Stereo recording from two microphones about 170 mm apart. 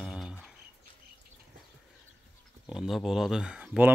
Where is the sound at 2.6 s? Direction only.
Centre (ahead or behind).